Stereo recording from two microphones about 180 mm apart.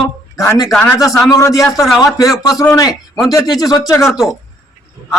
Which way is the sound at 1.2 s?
20° left (ahead or behind).